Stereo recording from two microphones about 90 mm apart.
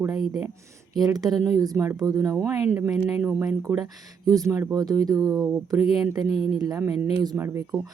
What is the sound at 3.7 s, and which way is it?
Speech, 45° right (ahead or behind).